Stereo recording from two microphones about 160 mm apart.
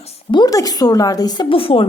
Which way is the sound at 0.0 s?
30° left (ahead or behind).